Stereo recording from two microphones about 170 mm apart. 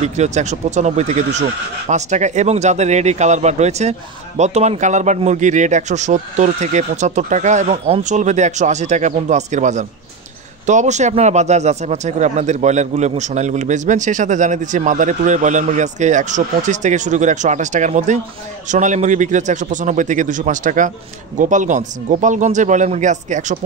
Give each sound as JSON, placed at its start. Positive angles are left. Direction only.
{"t": 0.0, "sound": "a man's voice", "side_deg": -40}